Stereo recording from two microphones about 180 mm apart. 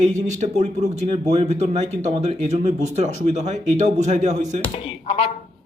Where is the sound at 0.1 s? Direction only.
40° right (ahead or behind).